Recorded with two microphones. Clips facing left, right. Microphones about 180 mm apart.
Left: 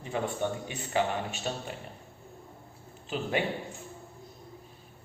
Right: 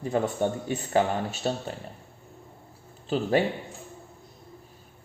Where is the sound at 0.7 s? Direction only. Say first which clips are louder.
Right 6 dB; 40° right (ahead or behind).